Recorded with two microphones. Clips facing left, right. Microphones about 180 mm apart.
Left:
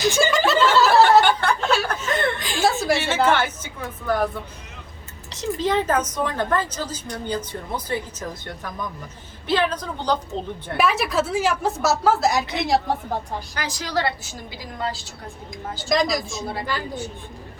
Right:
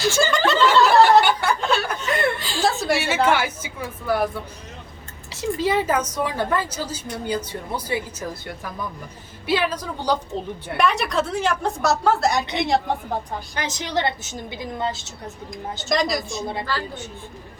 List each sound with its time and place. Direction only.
0.0 s snicker: 15° left (ahead or behind)
0.3 s snicker: 5° left (ahead or behind)
1.2 s snicker: 10° right (ahead or behind)
1.6 s chuckle: centre (ahead or behind)
2.4 s chuckle: 15° left (ahead or behind)
2.9 s a woman's voice: centre (ahead or behind)
3.2 s a woman's voice: 10° right (ahead or behind)
5.3 s a woman's voice: 10° right (ahead or behind)
10.8 s a woman's voice: 5° left (ahead or behind)
13.6 s a woman's voice: 20° right (ahead or behind)
15.9 s a woman's voice: centre (ahead or behind)
16.7 s snicker: 15° left (ahead or behind)